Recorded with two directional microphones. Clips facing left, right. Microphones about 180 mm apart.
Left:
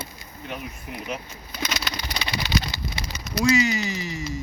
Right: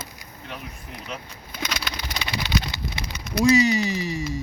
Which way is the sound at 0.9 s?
10° left (ahead or behind).